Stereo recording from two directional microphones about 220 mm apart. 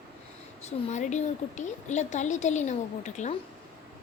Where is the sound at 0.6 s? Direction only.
30° left (ahead or behind).